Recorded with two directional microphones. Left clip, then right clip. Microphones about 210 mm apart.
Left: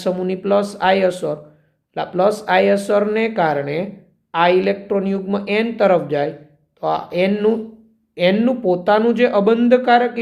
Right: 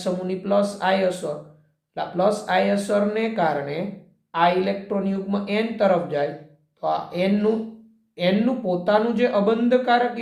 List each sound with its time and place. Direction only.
0.0 s speech: 45° left (ahead or behind)